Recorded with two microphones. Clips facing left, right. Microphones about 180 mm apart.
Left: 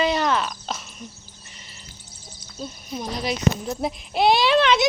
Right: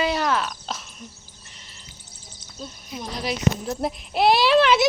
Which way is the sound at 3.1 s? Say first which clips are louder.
Left 1 dB; 5° right (ahead or behind).